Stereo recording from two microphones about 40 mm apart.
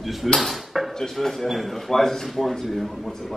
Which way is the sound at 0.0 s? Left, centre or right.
Centre.